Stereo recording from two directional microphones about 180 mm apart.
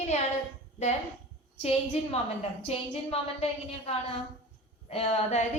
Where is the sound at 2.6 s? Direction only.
35° left (ahead or behind).